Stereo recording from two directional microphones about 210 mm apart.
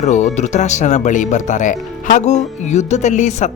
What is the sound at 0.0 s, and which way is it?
Speech, 35° left (ahead or behind).